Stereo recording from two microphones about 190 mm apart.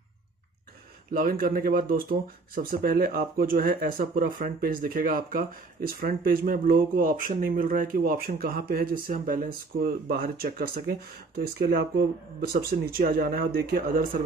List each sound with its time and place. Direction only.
1.1 s speech: 50° right (ahead or behind)